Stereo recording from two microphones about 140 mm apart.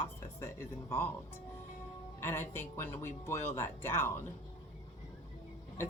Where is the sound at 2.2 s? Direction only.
15° left (ahead or behind).